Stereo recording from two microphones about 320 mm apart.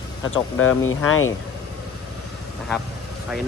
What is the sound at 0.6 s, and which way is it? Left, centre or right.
Speech, left.